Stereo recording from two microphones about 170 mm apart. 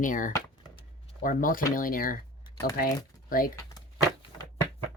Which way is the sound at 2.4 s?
15° left (ahead or behind).